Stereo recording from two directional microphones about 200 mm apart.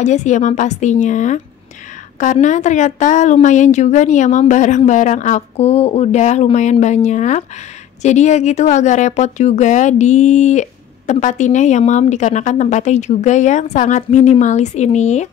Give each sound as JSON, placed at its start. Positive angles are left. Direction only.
{"t": 0.0, "sound": "speech", "side_deg": 35}